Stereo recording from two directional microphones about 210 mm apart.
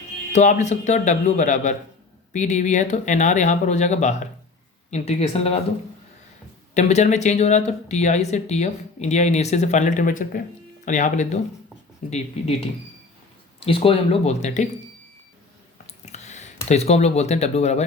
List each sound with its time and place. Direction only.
0.3 s speech: 35° left (ahead or behind)
6.7 s speech: 35° left (ahead or behind)
13.7 s speech: 25° left (ahead or behind)
16.1 s a sound: 35° left (ahead or behind)
16.6 s speech: 30° left (ahead or behind)